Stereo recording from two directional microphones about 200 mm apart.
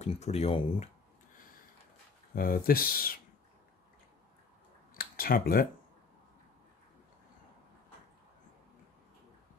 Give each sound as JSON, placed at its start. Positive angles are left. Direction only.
{"t": 0.0, "sound": "speech", "side_deg": 35}
{"t": 2.3, "sound": "speech", "side_deg": 45}
{"t": 4.9, "sound": "a sound", "side_deg": 50}